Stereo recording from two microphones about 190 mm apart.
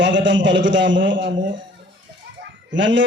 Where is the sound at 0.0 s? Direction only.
70° right (ahead or behind).